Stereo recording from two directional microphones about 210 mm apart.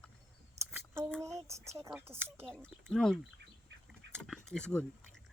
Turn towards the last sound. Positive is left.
turn(degrees=5)  # may be behind; listen again after turning